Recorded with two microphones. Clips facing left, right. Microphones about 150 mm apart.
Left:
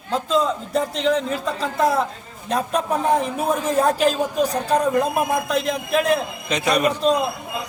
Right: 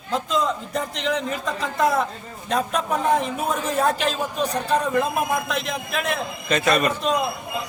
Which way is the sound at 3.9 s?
35° left (ahead or behind).